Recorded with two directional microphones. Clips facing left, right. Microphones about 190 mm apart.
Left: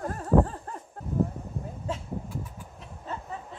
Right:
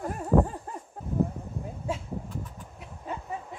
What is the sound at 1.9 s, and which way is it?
Speech, 10° right (ahead or behind).